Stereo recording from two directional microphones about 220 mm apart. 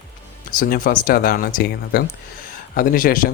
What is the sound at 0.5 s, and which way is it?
Speech, 40° left (ahead or behind).